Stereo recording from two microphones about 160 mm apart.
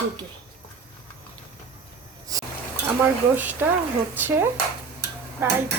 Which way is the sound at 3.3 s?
10° right (ahead or behind).